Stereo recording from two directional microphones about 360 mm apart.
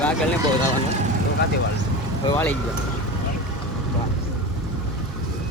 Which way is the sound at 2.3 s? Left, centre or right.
Centre.